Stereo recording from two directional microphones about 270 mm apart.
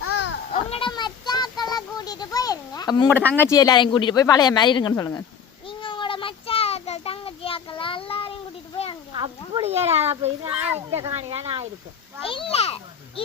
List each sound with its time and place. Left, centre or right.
0.0 s a sound: left
0.5 s child singing: left
9.5 s speech: right
10.4 s speech: centre
10.9 s speech: right
12.2 s a child's voice: centre